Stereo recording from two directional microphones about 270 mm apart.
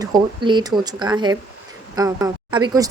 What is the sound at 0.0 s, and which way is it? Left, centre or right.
Speech, centre.